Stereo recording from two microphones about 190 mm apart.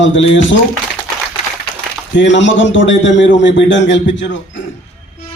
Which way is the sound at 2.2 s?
75° left (ahead or behind).